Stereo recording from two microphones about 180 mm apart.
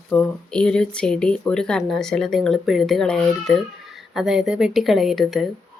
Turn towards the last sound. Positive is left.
turn(degrees=0)  # may be behind; listen again after turning